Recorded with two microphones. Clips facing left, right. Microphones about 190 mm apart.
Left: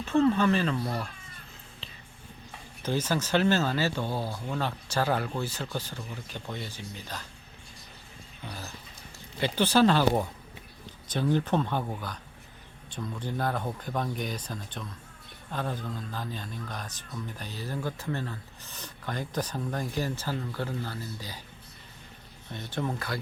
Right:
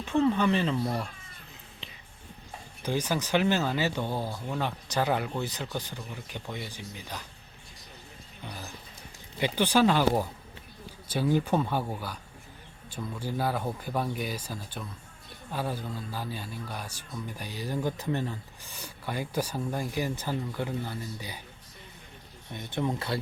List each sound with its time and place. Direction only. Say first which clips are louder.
0.0 s speech: left 1 dB; 15° right (ahead or behind)
1.8 s whispering: right 2 dB; 15° right (ahead or behind)
2.8 s speech: left 1 dB; 15° right (ahead or behind)
8.4 s music: even; 15° right (ahead or behind)
9.4 s speech: left 1 dB; 15° right (ahead or behind)
22.5 s speech: right 2 dB; 15° right (ahead or behind)
23.0 s speech: right 3 dB; 25° right (ahead or behind)